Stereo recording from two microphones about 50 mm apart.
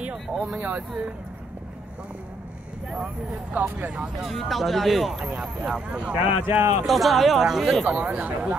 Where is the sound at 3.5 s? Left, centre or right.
Right.